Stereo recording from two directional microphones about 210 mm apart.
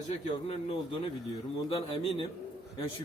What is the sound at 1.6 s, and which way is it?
Speech, 25° left (ahead or behind).